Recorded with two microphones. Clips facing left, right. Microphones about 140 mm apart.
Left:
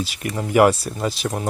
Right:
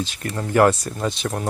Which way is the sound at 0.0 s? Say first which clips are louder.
Left 1 dB; 10° left (ahead or behind).